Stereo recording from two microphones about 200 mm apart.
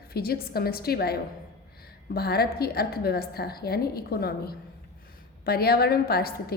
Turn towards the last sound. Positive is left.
turn(degrees=50)  # may be behind; listen again after turning